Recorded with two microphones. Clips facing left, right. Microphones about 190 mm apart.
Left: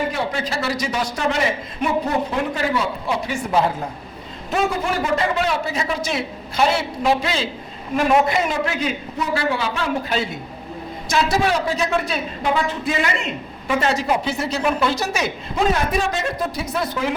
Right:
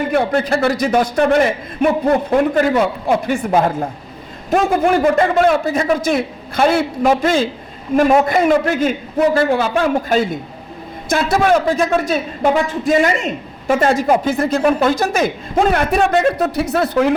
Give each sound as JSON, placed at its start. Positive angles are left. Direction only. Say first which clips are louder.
{"t": 0.1, "sound": "a man's voice", "louder": "right 9 dB", "side_deg": -55}